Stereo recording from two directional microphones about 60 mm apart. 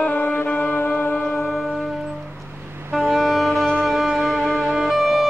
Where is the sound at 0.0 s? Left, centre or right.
Left.